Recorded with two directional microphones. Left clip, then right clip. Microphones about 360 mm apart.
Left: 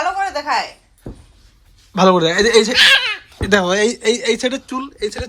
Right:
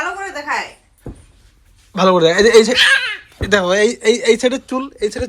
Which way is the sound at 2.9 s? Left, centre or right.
Left.